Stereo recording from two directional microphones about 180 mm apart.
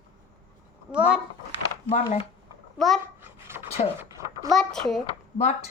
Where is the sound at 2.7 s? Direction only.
Centre (ahead or behind).